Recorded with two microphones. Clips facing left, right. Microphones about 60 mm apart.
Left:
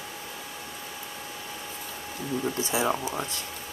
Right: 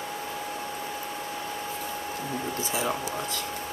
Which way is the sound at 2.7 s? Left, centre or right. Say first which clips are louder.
Left 2 dB; left.